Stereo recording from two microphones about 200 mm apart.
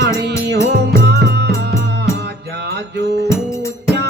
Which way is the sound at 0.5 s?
55° right (ahead or behind).